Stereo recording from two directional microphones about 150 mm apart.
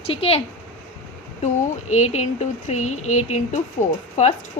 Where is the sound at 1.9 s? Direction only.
50° left (ahead or behind).